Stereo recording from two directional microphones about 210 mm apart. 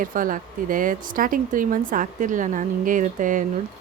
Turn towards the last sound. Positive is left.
turn(degrees=-40)  # may be behind; listen again after turning